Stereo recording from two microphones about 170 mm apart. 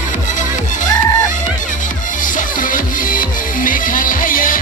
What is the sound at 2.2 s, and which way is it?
Music, 50° left (ahead or behind).